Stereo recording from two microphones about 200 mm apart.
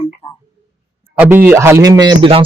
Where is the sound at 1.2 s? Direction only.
10° right (ahead or behind).